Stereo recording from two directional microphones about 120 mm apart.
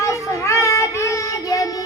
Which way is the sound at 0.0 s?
25° left (ahead or behind).